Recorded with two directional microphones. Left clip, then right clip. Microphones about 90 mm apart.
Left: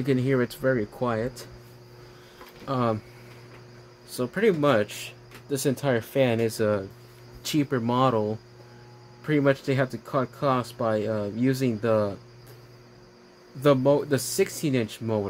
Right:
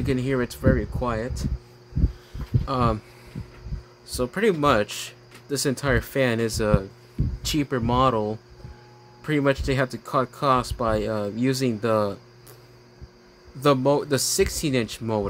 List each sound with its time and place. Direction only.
0.0 s speech: 10° left (ahead or behind)
2.6 s speech: 25° right (ahead or behind)
4.1 s speech: 35° right (ahead or behind)
7.4 s speech: 20° right (ahead or behind); by 12.2 s 35° right (ahead or behind)
13.6 s speech: 40° right (ahead or behind)